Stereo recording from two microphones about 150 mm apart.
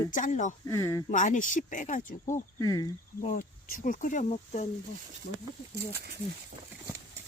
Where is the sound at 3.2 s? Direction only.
60° left (ahead or behind).